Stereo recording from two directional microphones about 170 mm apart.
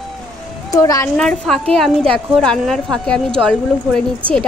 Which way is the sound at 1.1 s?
5° left (ahead or behind).